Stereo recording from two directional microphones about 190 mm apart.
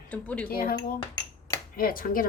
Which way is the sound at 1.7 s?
45° left (ahead or behind).